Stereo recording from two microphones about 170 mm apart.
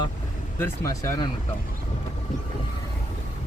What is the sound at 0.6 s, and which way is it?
Speech, 15° left (ahead or behind).